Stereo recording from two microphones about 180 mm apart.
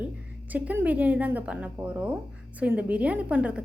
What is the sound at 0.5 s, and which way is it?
A woman's voice, 10° right (ahead or behind).